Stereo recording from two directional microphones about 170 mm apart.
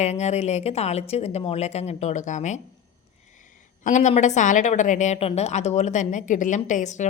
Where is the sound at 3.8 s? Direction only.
45° left (ahead or behind).